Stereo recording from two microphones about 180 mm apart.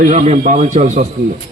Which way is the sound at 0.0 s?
40° right (ahead or behind).